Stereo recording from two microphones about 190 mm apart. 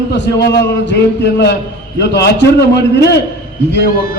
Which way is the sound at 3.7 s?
50° left (ahead or behind).